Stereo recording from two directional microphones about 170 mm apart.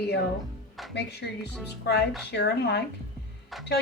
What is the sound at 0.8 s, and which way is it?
Music, centre (ahead or behind).